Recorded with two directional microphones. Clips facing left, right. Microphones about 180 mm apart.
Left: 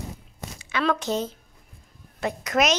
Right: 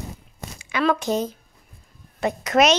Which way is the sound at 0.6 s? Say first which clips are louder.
Right 3 dB; 10° right (ahead or behind).